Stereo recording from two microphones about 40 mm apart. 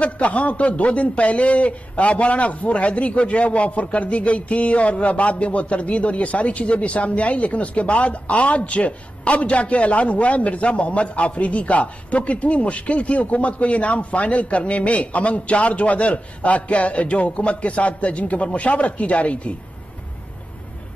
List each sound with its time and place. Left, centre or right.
0.0 s a man's voice: left